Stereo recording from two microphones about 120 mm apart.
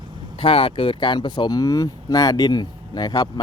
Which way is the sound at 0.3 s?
50° left (ahead or behind).